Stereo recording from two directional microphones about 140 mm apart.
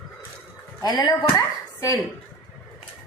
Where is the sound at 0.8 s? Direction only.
30° left (ahead or behind).